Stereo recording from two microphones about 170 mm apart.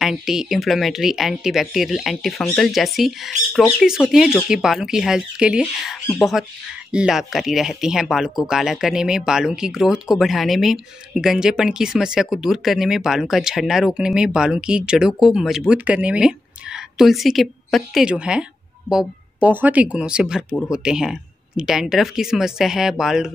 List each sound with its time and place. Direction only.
0.0 s speech: centre (ahead or behind)